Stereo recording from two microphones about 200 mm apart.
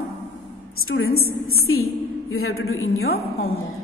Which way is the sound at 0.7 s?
90° left.